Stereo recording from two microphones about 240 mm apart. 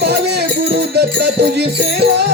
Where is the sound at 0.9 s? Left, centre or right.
Right.